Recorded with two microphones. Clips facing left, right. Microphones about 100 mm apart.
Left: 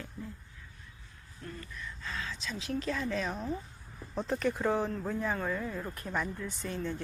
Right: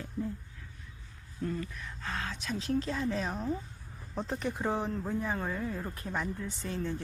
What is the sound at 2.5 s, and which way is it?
Speech, 30° right (ahead or behind).